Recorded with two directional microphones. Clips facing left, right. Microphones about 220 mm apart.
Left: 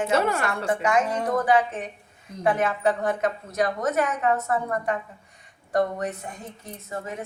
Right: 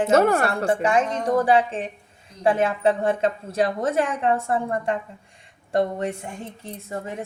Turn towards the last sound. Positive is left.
turn(degrees=-30)  # may be behind; listen again after turning